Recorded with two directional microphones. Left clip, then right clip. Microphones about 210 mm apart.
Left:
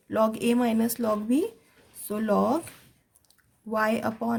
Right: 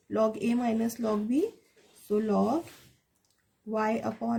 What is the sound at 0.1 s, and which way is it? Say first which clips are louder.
Speech: left 3 dB; 40° left (ahead or behind).